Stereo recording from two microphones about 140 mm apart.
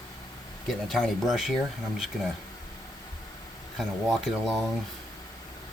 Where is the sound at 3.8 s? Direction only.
Centre (ahead or behind).